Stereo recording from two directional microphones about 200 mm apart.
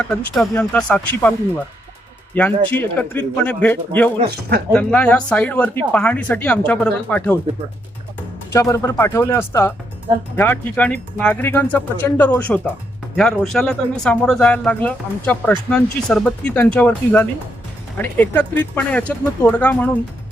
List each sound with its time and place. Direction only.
0.0 s speech: 5° left (ahead or behind)
2.3 s speech: 10° left (ahead or behind)
8.5 s speech: 15° left (ahead or behind)